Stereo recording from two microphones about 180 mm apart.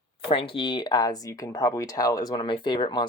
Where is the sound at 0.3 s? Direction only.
30° left (ahead or behind).